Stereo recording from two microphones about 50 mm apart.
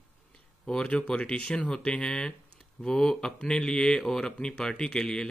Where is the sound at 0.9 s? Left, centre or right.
Left.